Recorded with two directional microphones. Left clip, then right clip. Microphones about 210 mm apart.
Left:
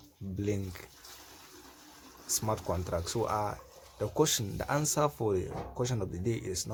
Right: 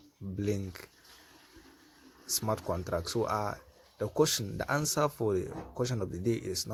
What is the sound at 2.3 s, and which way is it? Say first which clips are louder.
Speech: even; 15° right (ahead or behind).